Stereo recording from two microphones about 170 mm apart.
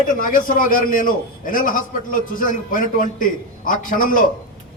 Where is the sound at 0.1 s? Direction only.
50° left (ahead or behind).